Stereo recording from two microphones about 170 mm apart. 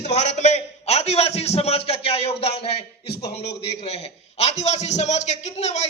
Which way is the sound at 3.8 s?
35° left (ahead or behind).